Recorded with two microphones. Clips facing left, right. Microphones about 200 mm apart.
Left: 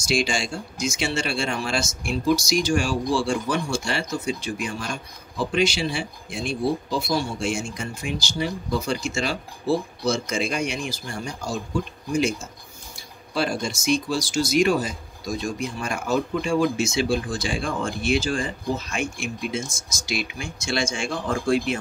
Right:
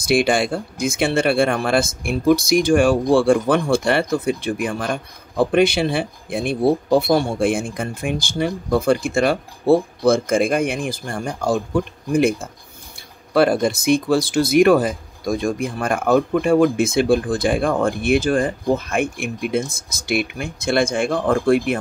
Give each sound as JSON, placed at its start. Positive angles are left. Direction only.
{"t": 0.0, "sound": "speech", "side_deg": -55}